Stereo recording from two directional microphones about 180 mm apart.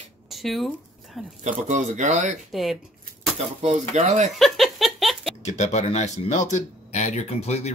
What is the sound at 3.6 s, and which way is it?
Speech, 40° right (ahead or behind).